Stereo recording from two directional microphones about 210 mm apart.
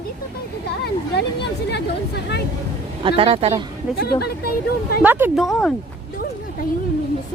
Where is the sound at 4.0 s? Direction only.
50° left (ahead or behind).